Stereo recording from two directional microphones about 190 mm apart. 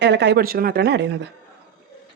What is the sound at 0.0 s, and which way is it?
Speech, 65° right (ahead or behind).